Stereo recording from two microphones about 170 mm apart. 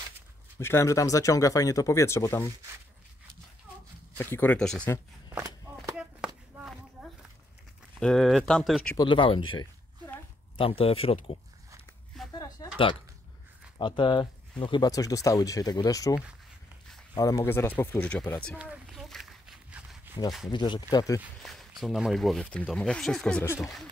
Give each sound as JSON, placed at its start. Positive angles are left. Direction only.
{"t": 0.6, "sound": "speech", "side_deg": 15}
{"t": 4.2, "sound": "speech", "side_deg": 10}
{"t": 5.3, "sound": "a sound", "side_deg": -15}
{"t": 5.9, "sound": "chopping", "side_deg": -5}
{"t": 8.0, "sound": "speech", "side_deg": 5}
{"t": 8.9, "sound": "speech", "side_deg": 30}
{"t": 12.4, "sound": "a sound", "side_deg": 20}
{"t": 13.7, "sound": "speech", "side_deg": 30}
{"t": 18.6, "sound": "walk", "side_deg": -5}
{"t": 20.2, "sound": "speech", "side_deg": 0}
{"t": 20.5, "sound": "speech", "side_deg": 25}
{"t": 21.2, "sound": "speech", "side_deg": 0}